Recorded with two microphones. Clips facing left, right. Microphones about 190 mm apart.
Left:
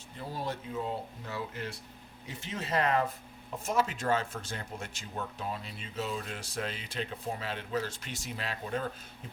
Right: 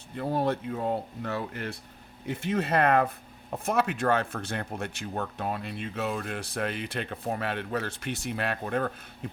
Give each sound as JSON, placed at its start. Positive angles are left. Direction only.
{"t": 0.2, "sound": "speech", "side_deg": -60}